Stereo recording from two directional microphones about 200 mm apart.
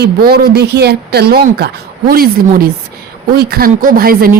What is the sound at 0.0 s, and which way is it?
A woman's voice, 50° right (ahead or behind).